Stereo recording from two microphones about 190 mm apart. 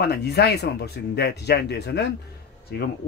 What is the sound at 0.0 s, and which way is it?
Speech, 60° left (ahead or behind).